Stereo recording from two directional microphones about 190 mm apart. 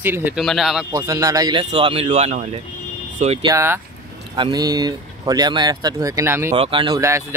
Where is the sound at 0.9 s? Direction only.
15° right (ahead or behind); by 3.4 s 35° right (ahead or behind).